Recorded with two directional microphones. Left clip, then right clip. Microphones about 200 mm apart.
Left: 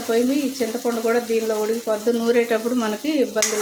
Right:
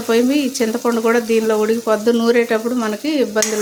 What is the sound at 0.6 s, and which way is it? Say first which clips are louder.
Speech: right 5 dB; 35° right (ahead or behind).